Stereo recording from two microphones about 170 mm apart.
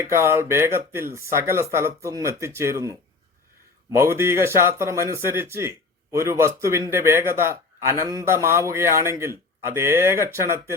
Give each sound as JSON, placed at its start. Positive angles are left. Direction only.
{"t": 0.0, "sound": "speech", "side_deg": -15}
{"t": 3.9, "sound": "speech", "side_deg": -15}